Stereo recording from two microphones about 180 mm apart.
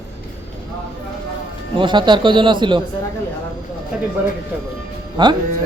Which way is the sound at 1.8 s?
25° right (ahead or behind).